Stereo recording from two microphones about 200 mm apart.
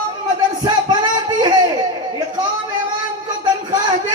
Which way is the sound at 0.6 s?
20° right (ahead or behind).